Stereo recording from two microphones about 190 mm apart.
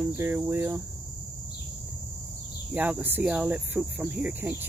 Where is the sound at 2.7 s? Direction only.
10° right (ahead or behind).